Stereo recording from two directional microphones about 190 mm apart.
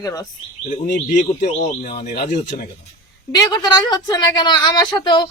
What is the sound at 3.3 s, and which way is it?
A woman's voice, 20° left (ahead or behind).